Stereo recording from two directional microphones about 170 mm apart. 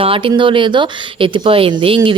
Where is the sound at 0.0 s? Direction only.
30° right (ahead or behind).